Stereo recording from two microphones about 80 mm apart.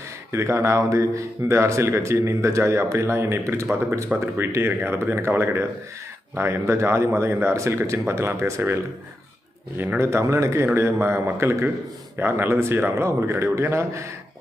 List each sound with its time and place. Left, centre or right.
0.3 s speech: right
10.0 s speech: right